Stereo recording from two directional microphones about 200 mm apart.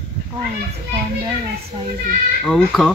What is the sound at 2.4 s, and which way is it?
Speech, centre (ahead or behind).